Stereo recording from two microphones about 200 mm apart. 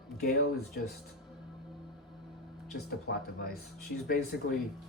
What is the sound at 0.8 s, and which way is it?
Speech, 50° left (ahead or behind).